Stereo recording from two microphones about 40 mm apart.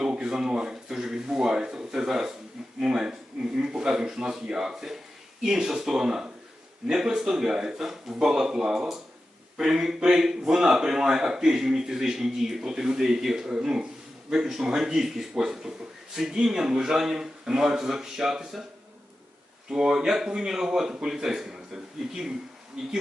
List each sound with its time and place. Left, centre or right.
0.0 s a man's voice: centre
2.8 s a sound: centre
3.6 s a man's voice: centre
19.7 s a man's voice: centre